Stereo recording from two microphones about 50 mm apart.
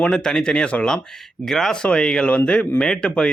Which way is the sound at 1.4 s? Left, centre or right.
Centre.